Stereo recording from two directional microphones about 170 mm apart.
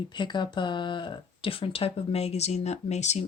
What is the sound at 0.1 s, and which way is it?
Speech, 25° left (ahead or behind).